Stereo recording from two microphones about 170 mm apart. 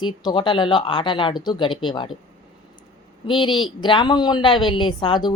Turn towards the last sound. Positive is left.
turn(degrees=30)  # may be behind; listen again after turning